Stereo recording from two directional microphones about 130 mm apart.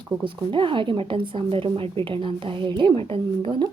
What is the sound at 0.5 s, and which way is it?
A woman's voice, 40° right (ahead or behind).